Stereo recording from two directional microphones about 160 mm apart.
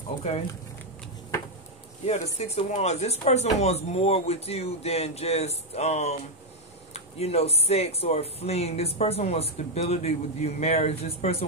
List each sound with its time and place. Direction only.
0.3 s speech: 40° left (ahead or behind)
2.0 s speech: 40° left (ahead or behind)